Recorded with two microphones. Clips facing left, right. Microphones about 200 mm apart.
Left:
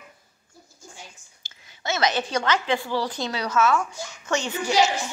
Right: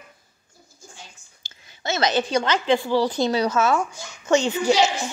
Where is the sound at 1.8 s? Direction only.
30° right (ahead or behind).